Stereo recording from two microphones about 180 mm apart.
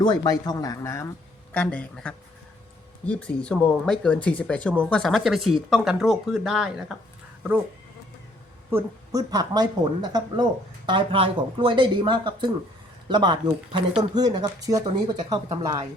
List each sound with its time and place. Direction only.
0.0 s speech: 20° left (ahead or behind); by 6.9 s centre (ahead or behind)
8.7 s speech: 20° right (ahead or behind)